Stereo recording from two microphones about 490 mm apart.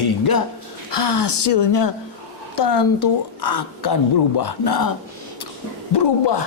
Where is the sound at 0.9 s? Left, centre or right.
Left.